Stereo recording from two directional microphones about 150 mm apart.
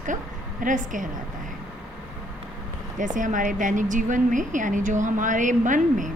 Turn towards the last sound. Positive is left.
turn(degrees=-60)  # may be behind; listen again after turning